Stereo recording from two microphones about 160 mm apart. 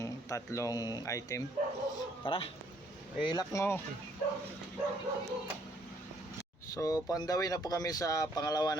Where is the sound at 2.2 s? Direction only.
35° left (ahead or behind); by 3.8 s 15° left (ahead or behind).